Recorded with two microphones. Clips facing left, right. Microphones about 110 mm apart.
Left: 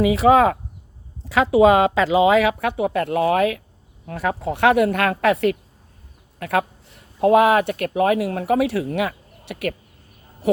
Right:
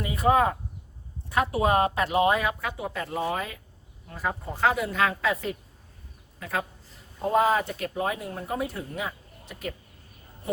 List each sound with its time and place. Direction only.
0.0 s speech: 90° left; by 9.7 s 70° left (ahead or behind)
10.4 s speech: 90° left